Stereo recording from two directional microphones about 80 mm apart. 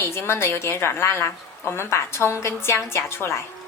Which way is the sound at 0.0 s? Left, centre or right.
Left.